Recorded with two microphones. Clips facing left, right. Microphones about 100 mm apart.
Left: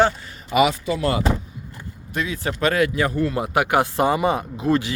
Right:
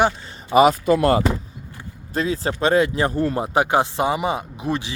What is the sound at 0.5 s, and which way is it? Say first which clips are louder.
Speech: right 5 dB; 40° right (ahead or behind).